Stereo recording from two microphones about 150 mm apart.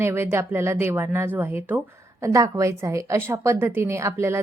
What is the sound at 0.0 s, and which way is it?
Speech, 15° right (ahead or behind).